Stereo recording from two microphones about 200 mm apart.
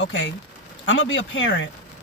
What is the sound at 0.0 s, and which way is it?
Speech, 70° left (ahead or behind).